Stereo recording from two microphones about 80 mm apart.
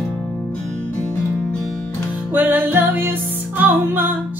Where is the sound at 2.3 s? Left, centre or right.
Right.